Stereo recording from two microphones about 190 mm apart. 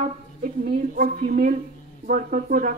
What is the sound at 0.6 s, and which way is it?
Speech, 45° right (ahead or behind).